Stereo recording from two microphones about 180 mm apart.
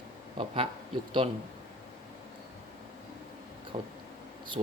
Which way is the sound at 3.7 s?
30° right (ahead or behind).